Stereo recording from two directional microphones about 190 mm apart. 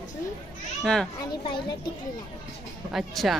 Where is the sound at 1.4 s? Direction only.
25° left (ahead or behind).